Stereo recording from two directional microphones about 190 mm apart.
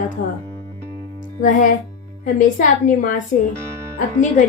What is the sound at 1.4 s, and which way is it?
A woman's voice, 45° left (ahead or behind).